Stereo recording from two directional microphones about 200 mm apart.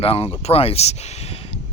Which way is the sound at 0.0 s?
30° left (ahead or behind).